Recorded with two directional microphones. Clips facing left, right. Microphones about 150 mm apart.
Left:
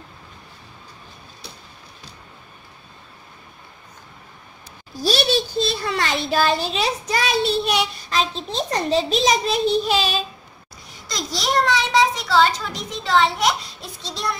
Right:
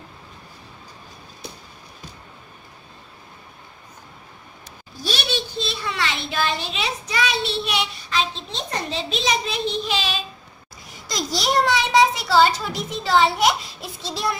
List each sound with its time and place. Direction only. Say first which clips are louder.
5.0 s a child's voice: left 7 dB; 40° left (ahead or behind)
11.1 s a child's voice: right 1 dB; centre (ahead or behind)